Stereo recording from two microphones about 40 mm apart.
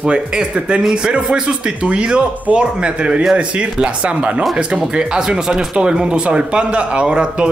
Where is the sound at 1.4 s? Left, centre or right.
Right.